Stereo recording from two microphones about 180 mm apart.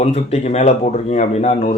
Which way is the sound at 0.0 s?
35° left (ahead or behind).